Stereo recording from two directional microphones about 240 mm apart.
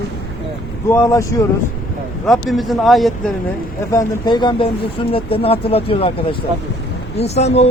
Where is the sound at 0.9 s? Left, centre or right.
Centre.